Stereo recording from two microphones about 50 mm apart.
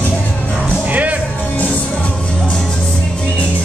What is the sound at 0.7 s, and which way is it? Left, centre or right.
Music, right.